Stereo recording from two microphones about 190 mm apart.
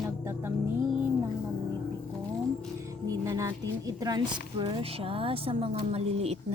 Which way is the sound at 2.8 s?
15° right (ahead or behind).